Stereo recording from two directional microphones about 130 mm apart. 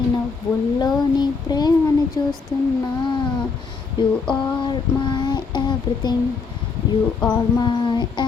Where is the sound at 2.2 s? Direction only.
25° left (ahead or behind).